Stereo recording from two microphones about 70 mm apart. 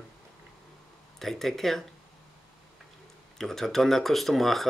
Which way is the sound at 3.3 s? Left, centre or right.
Centre.